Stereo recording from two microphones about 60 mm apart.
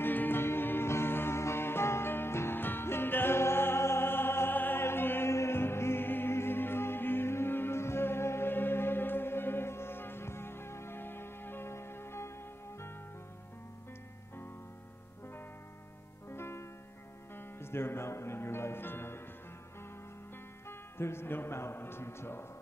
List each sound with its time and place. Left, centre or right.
0.0 s music: left
16.3 s music: left
20.6 s a man's voice: left